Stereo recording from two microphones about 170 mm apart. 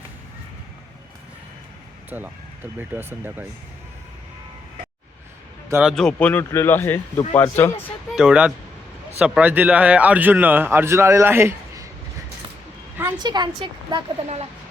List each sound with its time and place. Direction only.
2.0 s a man's voice: 10° right (ahead or behind)
5.8 s speech: centre (ahead or behind)
8.1 s a man's voice: 5° right (ahead or behind)
13.1 s speech: 25° right (ahead or behind)